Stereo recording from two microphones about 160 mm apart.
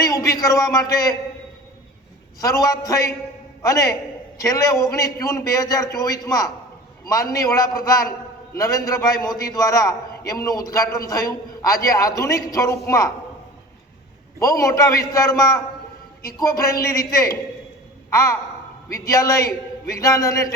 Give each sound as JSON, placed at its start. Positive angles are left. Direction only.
{"t": 0.0, "sound": "a man's voice", "side_deg": 20}
{"t": 2.4, "sound": "a man's voice", "side_deg": 20}
{"t": 14.3, "sound": "a man's voice", "side_deg": 20}